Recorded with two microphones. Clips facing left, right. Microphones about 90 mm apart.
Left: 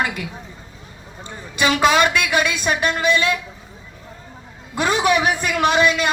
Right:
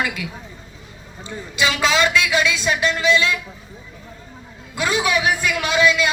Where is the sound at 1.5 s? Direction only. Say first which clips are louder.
Left 3 dB; 50° left (ahead or behind).